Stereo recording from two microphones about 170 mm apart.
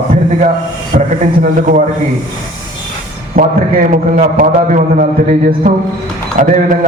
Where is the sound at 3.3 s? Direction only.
50° right (ahead or behind).